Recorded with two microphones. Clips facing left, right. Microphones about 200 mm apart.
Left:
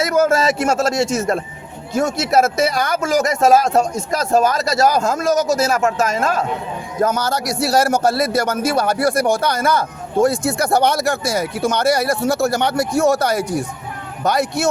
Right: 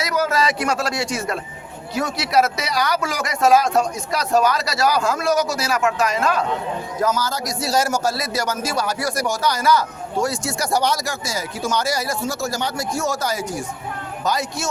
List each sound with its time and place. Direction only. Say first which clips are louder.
0.0 s a man's voice: left 5 dB; 50° left (ahead or behind)
7.0 s a man's voice: left 4 dB; 60° left (ahead or behind)